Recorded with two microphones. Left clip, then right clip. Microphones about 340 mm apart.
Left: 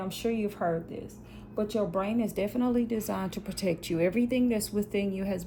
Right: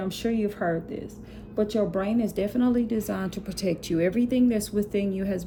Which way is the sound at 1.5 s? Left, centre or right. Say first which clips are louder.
Right 4 dB; centre.